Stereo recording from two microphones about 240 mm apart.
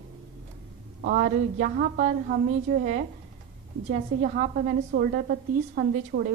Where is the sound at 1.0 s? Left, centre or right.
Right.